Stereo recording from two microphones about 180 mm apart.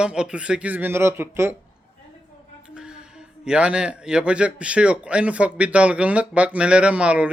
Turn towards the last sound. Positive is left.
turn(degrees=-5)  # may be behind; listen again after turning